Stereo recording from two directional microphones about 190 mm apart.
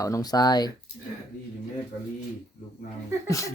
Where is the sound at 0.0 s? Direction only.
20° left (ahead or behind).